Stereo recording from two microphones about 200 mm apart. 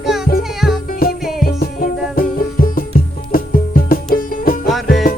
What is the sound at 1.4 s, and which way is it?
Music, 45° left (ahead or behind).